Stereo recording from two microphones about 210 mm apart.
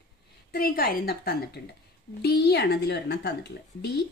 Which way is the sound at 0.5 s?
45° left (ahead or behind).